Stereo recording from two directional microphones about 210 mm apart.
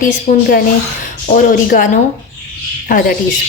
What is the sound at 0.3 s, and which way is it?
A woman's voice, 40° left (ahead or behind).